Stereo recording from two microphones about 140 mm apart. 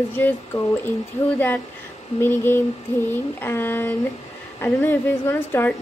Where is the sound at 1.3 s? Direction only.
15° left (ahead or behind).